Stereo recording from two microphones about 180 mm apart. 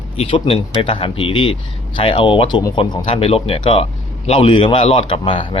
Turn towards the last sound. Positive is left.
turn(degrees=30)  # may be behind; listen again after turning